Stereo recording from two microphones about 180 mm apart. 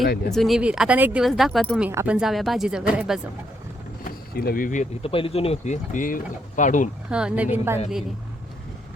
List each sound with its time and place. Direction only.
0.3 s speech: centre (ahead or behind)
1.9 s speech: 10° right (ahead or behind)
4.0 s speech: 55° left (ahead or behind)
5.1 s speech: 30° left (ahead or behind)
7.1 s a woman's voice: 5° right (ahead or behind)